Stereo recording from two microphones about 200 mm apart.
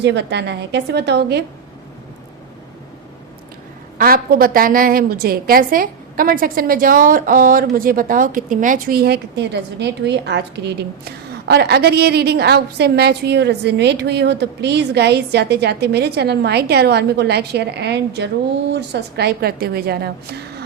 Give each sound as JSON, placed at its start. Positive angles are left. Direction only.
{"t": 0.0, "sound": "a woman's voice", "side_deg": -60}
{"t": 3.9, "sound": "a woman's voice", "side_deg": -50}